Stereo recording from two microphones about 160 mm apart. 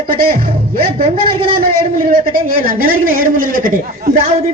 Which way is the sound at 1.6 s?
70° right (ahead or behind).